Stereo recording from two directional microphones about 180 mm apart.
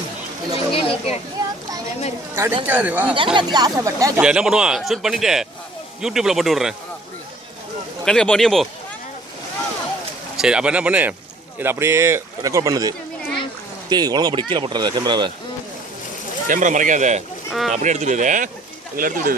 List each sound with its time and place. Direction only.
0.5 s a sound: 30° left (ahead or behind)
2.3 s speech: 15° right (ahead or behind)
3.3 s speech: 25° right (ahead or behind)
4.2 s speech: 5° right (ahead or behind)
8.0 s speech: 5° left (ahead or behind)
10.3 s speech: 5° right (ahead or behind)
13.9 s speech: 25° right (ahead or behind)
16.5 s speech: 45° right (ahead or behind)